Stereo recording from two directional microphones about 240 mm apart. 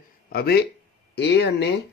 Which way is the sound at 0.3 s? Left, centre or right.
Left.